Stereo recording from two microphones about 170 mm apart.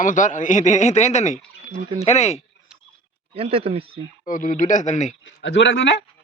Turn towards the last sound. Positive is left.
turn(degrees=90)